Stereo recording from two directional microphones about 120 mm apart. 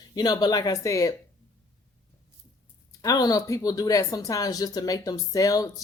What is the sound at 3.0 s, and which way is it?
Speech, 30° left (ahead or behind).